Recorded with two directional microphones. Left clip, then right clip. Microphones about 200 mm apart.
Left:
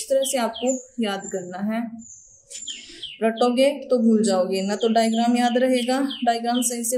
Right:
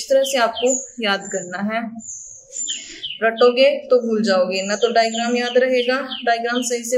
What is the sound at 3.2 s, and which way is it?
Speech, 25° left (ahead or behind).